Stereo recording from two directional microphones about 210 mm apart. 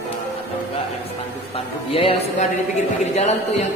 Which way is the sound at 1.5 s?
25° left (ahead or behind).